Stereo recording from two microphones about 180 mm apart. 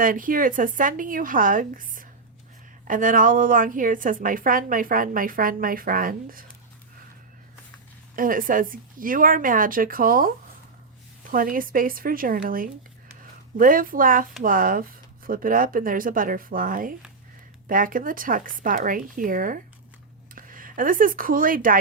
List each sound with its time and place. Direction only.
0.0 s a woman's voice: 50° right (ahead or behind)
8.1 s a woman's voice: 50° right (ahead or behind)